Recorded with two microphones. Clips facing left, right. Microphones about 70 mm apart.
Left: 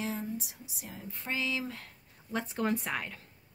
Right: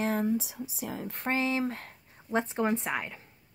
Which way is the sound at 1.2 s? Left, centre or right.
Right.